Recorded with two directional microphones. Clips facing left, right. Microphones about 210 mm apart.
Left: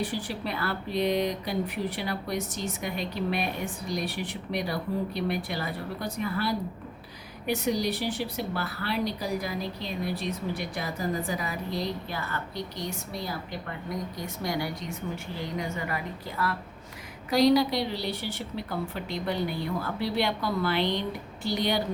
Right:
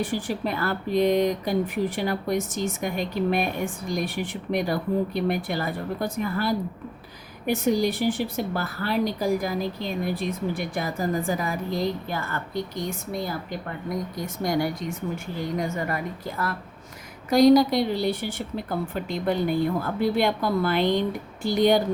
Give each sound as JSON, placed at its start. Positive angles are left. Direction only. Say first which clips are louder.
{"t": 0.0, "sound": "speech", "louder": "right 5 dB", "side_deg": -50}